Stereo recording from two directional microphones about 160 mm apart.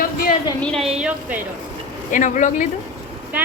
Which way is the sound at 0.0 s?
65° left (ahead or behind).